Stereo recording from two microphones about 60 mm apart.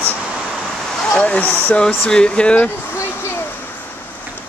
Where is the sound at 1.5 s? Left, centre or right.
Left.